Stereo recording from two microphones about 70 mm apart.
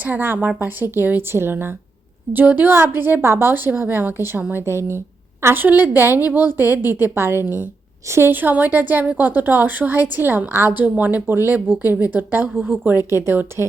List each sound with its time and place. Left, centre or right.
0.0 s a woman's voice: right
13.1 s a woman's voice: right